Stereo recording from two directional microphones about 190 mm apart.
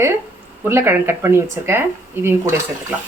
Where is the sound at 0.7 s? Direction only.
10° right (ahead or behind).